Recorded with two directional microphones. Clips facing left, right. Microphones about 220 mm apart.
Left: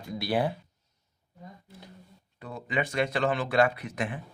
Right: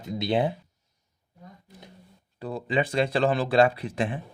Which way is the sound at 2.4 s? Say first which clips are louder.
Right 5 dB; 30° right (ahead or behind).